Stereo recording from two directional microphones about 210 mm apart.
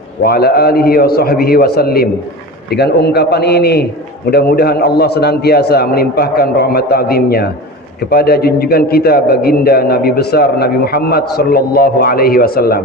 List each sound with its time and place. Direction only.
0.2 s a man's voice: 45° left (ahead or behind)